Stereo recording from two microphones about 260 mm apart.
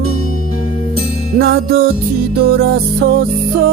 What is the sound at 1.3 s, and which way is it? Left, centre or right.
Music, right.